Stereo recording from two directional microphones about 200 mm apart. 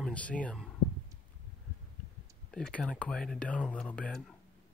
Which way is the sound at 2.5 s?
5° left (ahead or behind).